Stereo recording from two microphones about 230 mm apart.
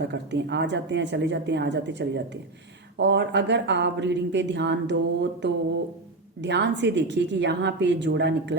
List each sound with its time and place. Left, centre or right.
0.0 s speech: right